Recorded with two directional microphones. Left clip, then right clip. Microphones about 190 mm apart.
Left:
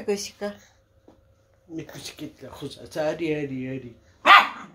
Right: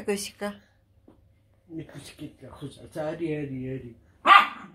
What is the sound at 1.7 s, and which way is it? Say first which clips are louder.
Speech: left 4 dB; 15° left (ahead or behind).